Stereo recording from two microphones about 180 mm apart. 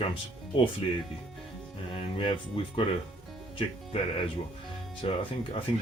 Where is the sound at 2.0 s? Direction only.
30° left (ahead or behind).